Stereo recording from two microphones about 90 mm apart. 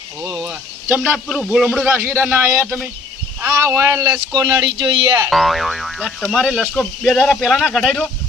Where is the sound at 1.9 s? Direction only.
25° right (ahead or behind).